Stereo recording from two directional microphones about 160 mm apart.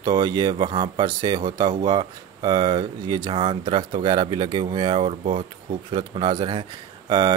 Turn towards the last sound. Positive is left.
turn(degrees=-30)  # may be behind; listen again after turning